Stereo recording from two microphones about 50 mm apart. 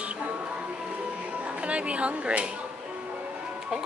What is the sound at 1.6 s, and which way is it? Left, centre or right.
Speech, right.